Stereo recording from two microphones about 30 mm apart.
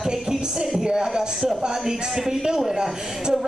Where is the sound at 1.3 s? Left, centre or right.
Centre.